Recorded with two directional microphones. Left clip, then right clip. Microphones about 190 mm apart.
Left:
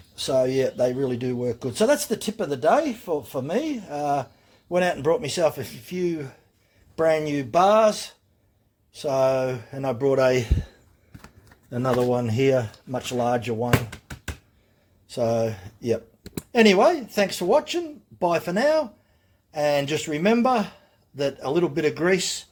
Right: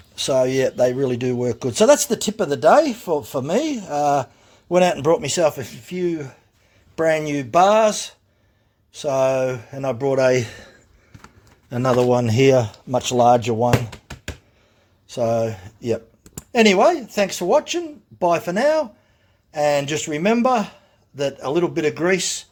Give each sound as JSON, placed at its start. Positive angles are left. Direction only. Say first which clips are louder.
{"t": 0.2, "sound": "a man's voice", "louder": "right 4 dB", "side_deg": -35}
{"t": 13.9, "sound": "a sound", "louder": "right 3 dB", "side_deg": -10}
{"t": 15.0, "sound": "a man's voice", "louder": "right 3 dB", "side_deg": -15}